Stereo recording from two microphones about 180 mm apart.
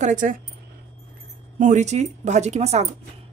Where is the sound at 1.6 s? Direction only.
40° right (ahead or behind).